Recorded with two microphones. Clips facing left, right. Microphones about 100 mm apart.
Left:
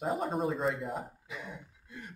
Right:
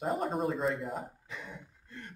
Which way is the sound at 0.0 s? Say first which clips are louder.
Even; centre (ahead or behind).